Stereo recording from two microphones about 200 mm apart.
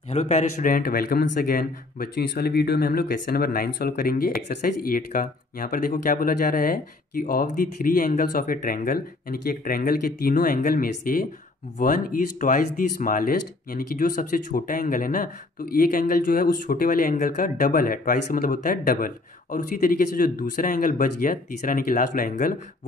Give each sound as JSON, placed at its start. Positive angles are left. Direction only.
{"t": 0.1, "sound": "speech", "side_deg": 35}